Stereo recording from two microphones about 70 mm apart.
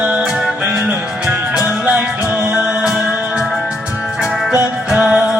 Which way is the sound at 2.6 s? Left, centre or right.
Centre.